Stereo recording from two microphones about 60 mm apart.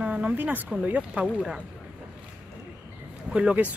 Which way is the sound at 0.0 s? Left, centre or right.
Centre.